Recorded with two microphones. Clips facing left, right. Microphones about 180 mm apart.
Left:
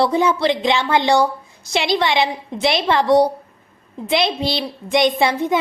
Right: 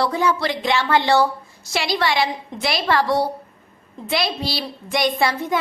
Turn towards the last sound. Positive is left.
turn(degrees=20)  # may be behind; listen again after turning